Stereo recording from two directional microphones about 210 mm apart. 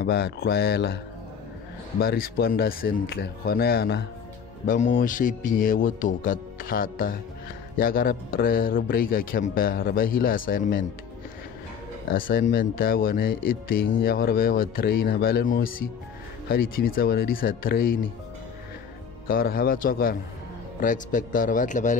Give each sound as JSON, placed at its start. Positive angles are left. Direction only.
{"t": 0.0, "sound": "a man's voice", "side_deg": 50}
{"t": 2.0, "sound": "a man's voice", "side_deg": 45}
{"t": 12.1, "sound": "a man's voice", "side_deg": 45}
{"t": 19.2, "sound": "a man's voice", "side_deg": 45}